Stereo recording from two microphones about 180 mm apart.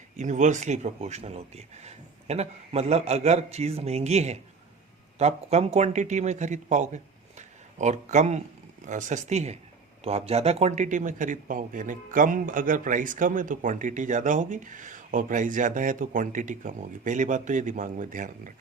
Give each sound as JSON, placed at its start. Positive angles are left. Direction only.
{"t": 0.2, "sound": "speech", "side_deg": -45}